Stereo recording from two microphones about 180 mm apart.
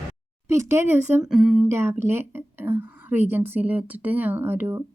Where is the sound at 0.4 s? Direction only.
15° right (ahead or behind).